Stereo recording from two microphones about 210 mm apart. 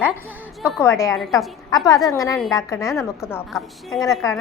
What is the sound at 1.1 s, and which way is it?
Speech, centre (ahead or behind).